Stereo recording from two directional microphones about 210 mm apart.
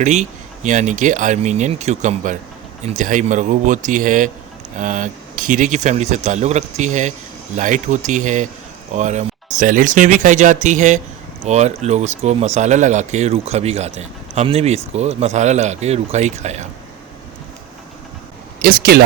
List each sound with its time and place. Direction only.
0.0 s speech: 35° right (ahead or behind)
18.6 s speech: 45° right (ahead or behind)